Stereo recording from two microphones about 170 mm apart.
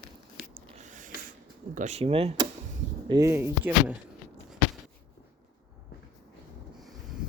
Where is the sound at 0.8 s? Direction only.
50° right (ahead or behind).